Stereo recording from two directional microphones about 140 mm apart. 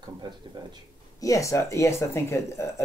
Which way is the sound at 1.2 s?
25° left (ahead or behind).